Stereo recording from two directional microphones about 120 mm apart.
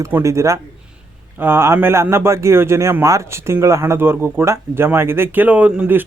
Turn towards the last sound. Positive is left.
turn(degrees=-15)  # may be behind; listen again after turning